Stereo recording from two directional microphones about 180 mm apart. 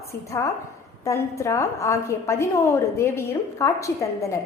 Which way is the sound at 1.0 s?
15° left (ahead or behind).